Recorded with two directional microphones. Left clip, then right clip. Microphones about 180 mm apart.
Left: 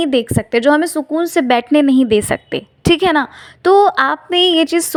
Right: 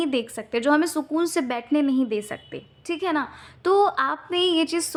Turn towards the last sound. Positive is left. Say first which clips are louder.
# left 9 dB
turn(degrees=40)  # may be behind; listen again after turning